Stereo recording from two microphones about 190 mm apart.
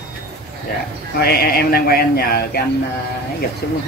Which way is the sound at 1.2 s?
55° left (ahead or behind).